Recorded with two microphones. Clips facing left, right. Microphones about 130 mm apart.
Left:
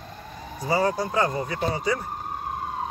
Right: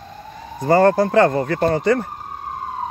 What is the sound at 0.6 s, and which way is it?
Speech, 55° right (ahead or behind).